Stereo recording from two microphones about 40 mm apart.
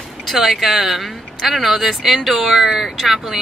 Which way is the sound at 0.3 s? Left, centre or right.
Centre.